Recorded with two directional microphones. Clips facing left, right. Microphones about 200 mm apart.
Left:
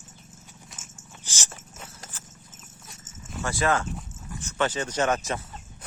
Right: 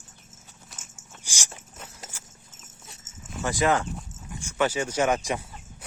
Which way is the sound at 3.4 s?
15° right (ahead or behind).